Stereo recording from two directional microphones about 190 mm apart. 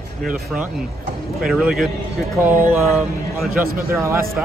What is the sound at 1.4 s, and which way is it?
Speech, 5° right (ahead or behind).